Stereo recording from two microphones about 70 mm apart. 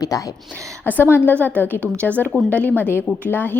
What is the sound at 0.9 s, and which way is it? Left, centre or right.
A woman's voice, left.